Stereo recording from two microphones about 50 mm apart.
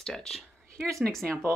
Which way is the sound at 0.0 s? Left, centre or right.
Centre.